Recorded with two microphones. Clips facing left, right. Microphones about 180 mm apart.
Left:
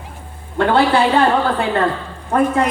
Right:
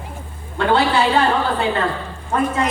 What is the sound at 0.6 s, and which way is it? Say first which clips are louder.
Speech: left 3 dB; 50° left (ahead or behind).